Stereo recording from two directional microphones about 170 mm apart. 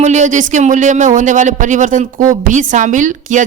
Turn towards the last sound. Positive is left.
turn(degrees=-45)  # may be behind; listen again after turning